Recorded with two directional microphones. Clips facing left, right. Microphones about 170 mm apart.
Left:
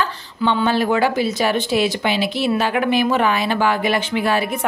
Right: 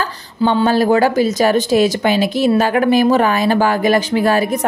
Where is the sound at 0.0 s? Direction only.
35° right (ahead or behind).